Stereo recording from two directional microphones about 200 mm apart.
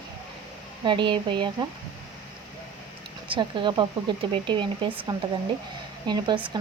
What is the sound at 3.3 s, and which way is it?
Speech, 25° right (ahead or behind).